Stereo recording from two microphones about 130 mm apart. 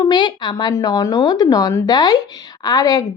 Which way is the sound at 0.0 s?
35° left (ahead or behind).